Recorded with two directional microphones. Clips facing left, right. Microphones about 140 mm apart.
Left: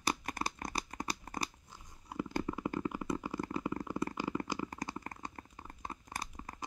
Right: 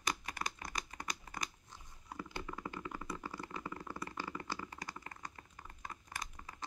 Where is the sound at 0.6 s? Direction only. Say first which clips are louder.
Left 5 dB; 45° left (ahead or behind).